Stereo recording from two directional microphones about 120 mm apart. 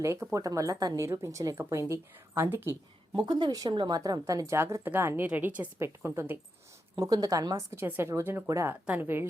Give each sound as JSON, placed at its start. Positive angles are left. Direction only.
{"t": 0.0, "sound": "speech", "side_deg": -25}
{"t": 3.2, "sound": "speech", "side_deg": -40}
{"t": 7.0, "sound": "speech", "side_deg": -30}
{"t": 8.7, "sound": "a woman's voice", "side_deg": -15}